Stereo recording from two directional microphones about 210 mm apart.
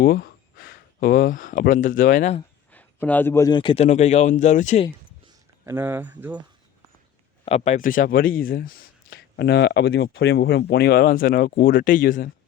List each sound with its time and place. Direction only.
0.0 s speech: 45° left (ahead or behind)
2.7 s a man's voice: 10° left (ahead or behind); by 4.9 s 35° left (ahead or behind)
5.2 s speech: 10° right (ahead or behind)
7.4 s speech: 30° left (ahead or behind)